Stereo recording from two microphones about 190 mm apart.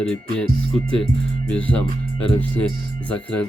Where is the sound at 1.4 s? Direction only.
5° left (ahead or behind).